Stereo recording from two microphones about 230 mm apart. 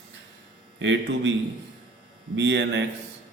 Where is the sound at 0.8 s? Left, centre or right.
Right.